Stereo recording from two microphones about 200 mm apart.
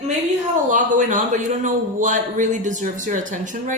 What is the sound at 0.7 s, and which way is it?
A man's voice, 40° right (ahead or behind).